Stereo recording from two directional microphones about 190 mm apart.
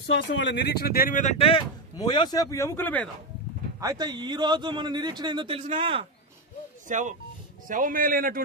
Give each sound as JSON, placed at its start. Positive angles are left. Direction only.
{"t": 0.1, "sound": "speech", "side_deg": 70}
{"t": 2.0, "sound": "speech", "side_deg": 25}
{"t": 3.8, "sound": "speech", "side_deg": -20}
{"t": 6.9, "sound": "a man's voice", "side_deg": -40}